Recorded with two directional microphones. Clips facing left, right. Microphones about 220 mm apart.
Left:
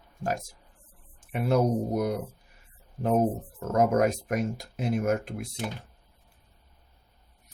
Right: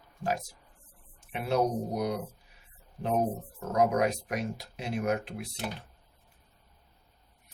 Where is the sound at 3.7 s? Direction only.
45° left (ahead or behind).